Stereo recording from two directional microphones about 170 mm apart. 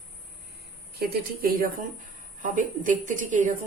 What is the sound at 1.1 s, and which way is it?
A woman's voice, 55° right (ahead or behind).